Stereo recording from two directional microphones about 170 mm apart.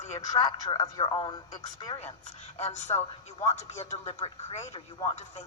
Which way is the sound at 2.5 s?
40° left (ahead or behind).